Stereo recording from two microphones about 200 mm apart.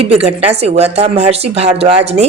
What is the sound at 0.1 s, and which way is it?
Speech, 30° right (ahead or behind).